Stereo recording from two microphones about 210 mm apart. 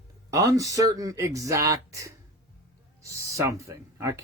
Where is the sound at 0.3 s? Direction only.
15° right (ahead or behind).